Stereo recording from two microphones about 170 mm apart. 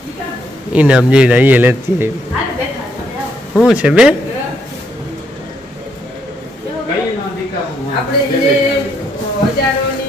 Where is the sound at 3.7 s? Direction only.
5° right (ahead or behind).